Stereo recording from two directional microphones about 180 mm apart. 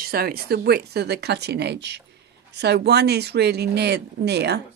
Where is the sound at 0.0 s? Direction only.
55° right (ahead or behind).